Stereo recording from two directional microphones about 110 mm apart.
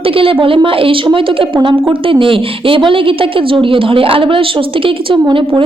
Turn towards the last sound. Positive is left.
turn(degrees=-50)  # may be behind; listen again after turning